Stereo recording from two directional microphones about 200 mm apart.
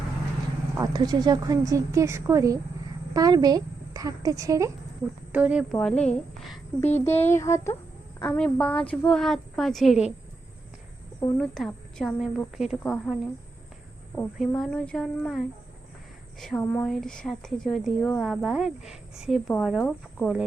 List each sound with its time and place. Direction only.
0.8 s a woman's voice: 20° right (ahead or behind)
5.7 s a woman's voice: 5° left (ahead or behind)
6.9 s child singing: 10° left (ahead or behind)
8.2 s a woman's voice: 5° left (ahead or behind)
11.3 s a woman's voice: centre (ahead or behind)
14.2 s a woman's voice: 5° left (ahead or behind)